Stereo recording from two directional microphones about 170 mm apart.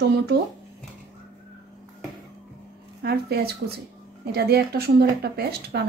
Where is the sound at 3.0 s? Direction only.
70° right (ahead or behind).